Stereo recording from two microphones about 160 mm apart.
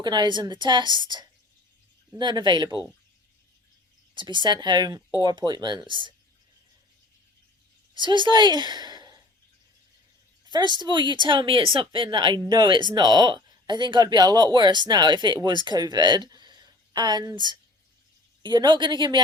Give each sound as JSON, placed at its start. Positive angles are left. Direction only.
{"t": 0.0, "sound": "speech", "side_deg": -25}
{"t": 4.1, "sound": "speech", "side_deg": -30}
{"t": 7.9, "sound": "a woman's voice", "side_deg": -30}
{"t": 10.8, "sound": "speech", "side_deg": -30}
{"t": 18.4, "sound": "speech", "side_deg": -30}